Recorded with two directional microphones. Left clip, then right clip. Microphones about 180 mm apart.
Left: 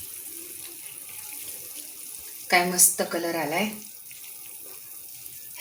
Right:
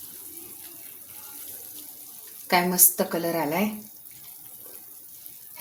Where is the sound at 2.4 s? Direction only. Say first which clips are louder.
Left 1 dB; 55° right (ahead or behind).